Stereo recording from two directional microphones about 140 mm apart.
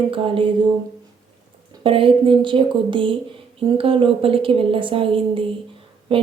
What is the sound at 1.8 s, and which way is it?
Speech, 40° right (ahead or behind).